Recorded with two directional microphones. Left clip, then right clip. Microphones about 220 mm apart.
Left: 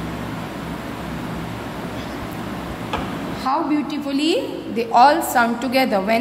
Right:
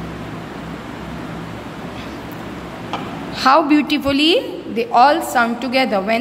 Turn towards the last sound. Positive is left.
turn(degrees=-10)  # may be behind; listen again after turning